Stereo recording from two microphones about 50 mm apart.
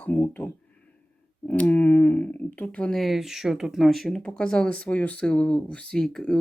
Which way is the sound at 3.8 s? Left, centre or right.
Centre.